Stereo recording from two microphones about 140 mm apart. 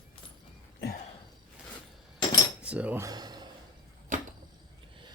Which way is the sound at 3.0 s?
30° right (ahead or behind).